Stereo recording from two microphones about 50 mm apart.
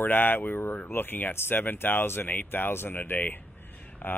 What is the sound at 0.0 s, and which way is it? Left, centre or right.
Speech, left.